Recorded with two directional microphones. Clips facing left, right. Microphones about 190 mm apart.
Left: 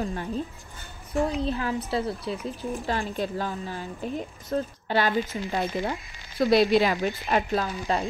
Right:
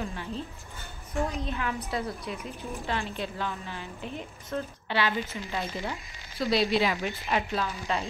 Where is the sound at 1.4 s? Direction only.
35° left (ahead or behind).